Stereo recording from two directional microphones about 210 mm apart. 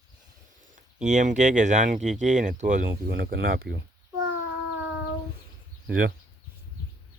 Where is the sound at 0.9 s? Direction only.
35° right (ahead or behind).